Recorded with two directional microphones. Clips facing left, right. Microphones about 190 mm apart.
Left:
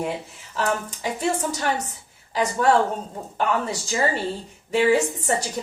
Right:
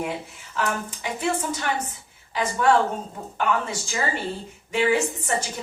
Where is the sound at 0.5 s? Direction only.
35° left (ahead or behind).